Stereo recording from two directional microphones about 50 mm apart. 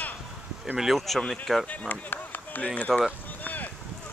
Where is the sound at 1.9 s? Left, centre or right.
Left.